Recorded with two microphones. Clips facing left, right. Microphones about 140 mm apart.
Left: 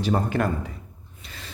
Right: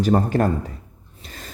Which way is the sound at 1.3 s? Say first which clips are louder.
Right 3 dB; 45° right (ahead or behind).